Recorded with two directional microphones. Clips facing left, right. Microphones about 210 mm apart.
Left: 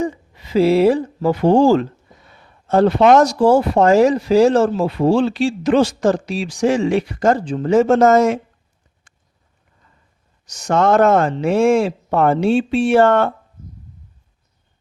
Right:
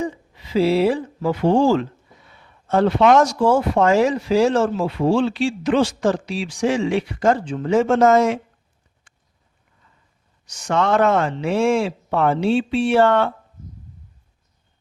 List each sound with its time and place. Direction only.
0.0 s speech: 45° left (ahead or behind)
10.4 s speech: 40° left (ahead or behind)